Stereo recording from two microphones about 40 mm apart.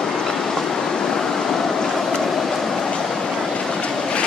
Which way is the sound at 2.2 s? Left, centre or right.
Centre.